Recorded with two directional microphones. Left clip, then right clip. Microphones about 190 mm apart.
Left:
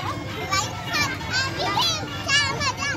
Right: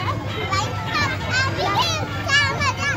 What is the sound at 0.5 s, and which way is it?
Children playing, 45° left (ahead or behind).